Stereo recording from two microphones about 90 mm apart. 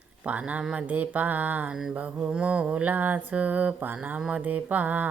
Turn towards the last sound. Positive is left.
turn(degrees=-15)  # may be behind; listen again after turning